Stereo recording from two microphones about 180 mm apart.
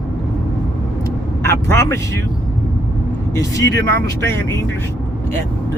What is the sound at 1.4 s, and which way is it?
Speech, 15° left (ahead or behind).